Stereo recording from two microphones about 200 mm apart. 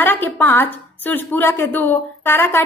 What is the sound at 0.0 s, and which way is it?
A woman's voice, 10° left (ahead or behind).